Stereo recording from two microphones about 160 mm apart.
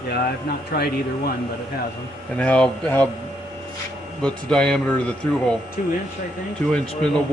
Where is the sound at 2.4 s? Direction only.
5° left (ahead or behind).